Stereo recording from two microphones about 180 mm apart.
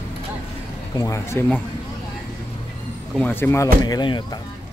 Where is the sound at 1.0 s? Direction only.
15° left (ahead or behind).